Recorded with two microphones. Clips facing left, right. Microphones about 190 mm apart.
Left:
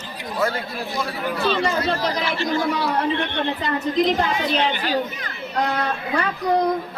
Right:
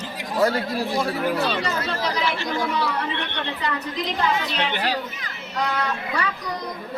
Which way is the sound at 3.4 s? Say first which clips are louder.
Left 4 dB; 50° left (ahead or behind).